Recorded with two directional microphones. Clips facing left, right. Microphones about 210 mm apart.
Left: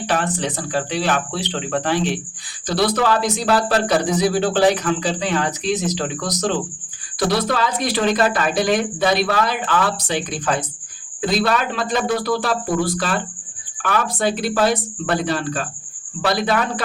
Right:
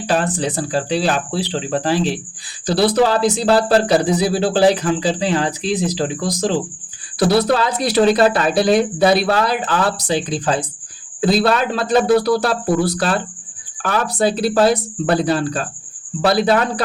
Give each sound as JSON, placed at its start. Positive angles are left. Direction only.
{"t": 0.1, "sound": "a man's voice", "side_deg": -35}
{"t": 13.8, "sound": "a man's voice", "side_deg": -35}